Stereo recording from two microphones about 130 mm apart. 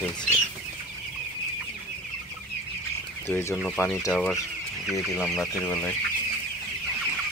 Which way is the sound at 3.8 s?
10° left (ahead or behind).